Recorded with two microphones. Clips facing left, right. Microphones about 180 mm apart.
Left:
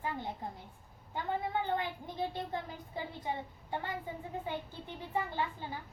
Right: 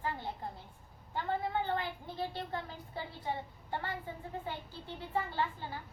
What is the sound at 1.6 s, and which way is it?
A child's voice, 15° left (ahead or behind).